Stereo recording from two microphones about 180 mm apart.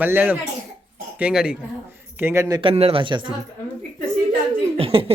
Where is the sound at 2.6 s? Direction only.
30° right (ahead or behind).